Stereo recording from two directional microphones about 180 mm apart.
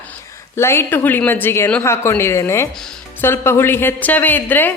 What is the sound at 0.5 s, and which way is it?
Speech, 15° left (ahead or behind).